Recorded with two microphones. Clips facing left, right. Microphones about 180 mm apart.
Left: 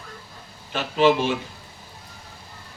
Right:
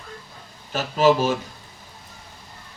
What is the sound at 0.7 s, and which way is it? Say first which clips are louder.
Speech: right 1 dB; 40° right (ahead or behind).